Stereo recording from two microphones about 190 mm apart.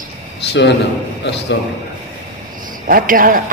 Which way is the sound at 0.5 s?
65° left (ahead or behind).